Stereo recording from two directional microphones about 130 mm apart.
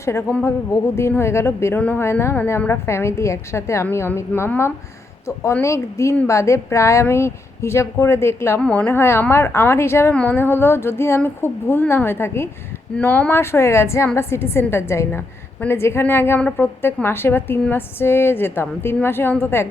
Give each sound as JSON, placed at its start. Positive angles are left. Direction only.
{"t": 0.0, "sound": "a woman's voice", "side_deg": 20}